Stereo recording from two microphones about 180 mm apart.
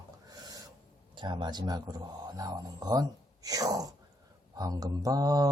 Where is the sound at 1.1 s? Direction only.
25° right (ahead or behind).